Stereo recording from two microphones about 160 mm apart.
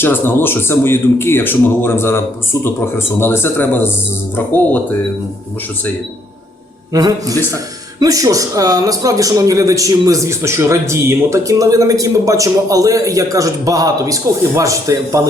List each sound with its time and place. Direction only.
0.0 s speech: 15° left (ahead or behind)
6.9 s a man's voice: 20° right (ahead or behind)